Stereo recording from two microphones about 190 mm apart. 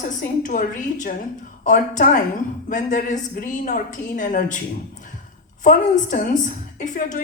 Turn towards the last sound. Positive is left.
turn(degrees=40)  # may be behind; listen again after turning